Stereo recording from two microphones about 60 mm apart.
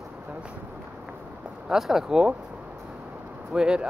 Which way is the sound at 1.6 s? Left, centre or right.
Centre.